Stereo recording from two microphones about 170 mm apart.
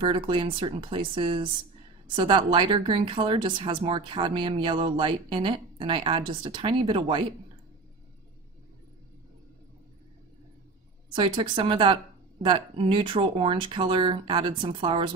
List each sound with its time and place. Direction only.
0.0 s a woman's voice: 30° right (ahead or behind)
11.1 s a woman's voice: 30° right (ahead or behind)